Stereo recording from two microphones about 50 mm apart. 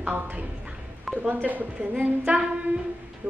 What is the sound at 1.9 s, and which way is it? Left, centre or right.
Speech, right.